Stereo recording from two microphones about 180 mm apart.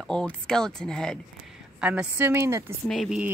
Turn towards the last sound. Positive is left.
turn(degrees=0)  # may be behind; listen again after turning